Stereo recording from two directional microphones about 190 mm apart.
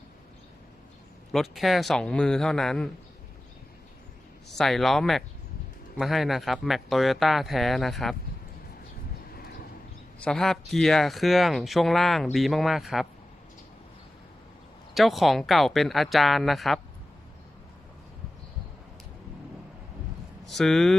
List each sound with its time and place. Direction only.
1.3 s speech: centre (ahead or behind)
4.5 s speech: centre (ahead or behind)
9.3 s horse: 50° left (ahead or behind)
10.2 s speech: 5° left (ahead or behind)
14.9 s speech: centre (ahead or behind)
20.5 s speech: centre (ahead or behind)